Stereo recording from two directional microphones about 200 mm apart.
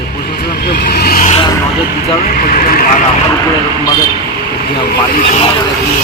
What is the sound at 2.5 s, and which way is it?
Speech, 45° left (ahead or behind).